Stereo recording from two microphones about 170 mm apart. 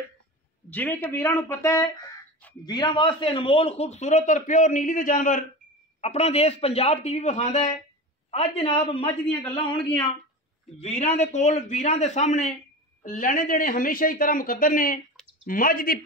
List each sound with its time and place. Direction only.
0.7 s speech: 10° left (ahead or behind); by 5.4 s 50° left (ahead or behind)
5.9 s speech: 40° left (ahead or behind); by 16.0 s 60° left (ahead or behind)